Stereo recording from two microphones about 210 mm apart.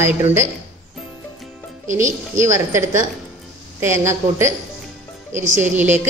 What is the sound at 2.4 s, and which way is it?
A woman's voice, 15° right (ahead or behind).